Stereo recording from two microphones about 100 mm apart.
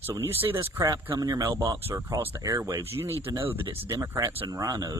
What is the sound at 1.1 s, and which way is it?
Speech, 40° right (ahead or behind).